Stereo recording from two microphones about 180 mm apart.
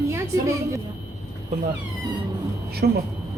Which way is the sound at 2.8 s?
55° right (ahead or behind).